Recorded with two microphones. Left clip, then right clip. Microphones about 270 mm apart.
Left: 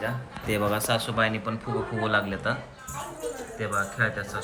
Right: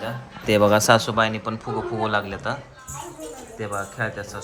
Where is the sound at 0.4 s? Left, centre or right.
Right.